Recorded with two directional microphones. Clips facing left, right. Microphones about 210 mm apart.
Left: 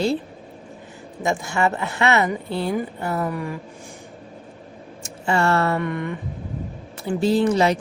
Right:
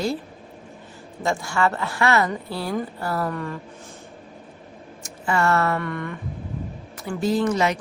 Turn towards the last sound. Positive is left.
turn(degrees=30)  # may be behind; listen again after turning